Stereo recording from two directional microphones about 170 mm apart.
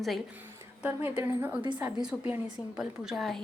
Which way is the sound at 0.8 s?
10° right (ahead or behind).